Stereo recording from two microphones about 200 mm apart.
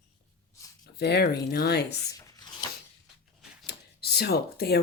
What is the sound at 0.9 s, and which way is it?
Speech, 55° left (ahead or behind).